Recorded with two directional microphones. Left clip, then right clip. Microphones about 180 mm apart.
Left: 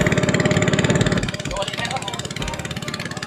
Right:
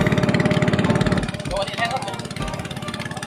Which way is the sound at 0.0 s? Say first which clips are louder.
Left 1 dB; 15° left (ahead or behind).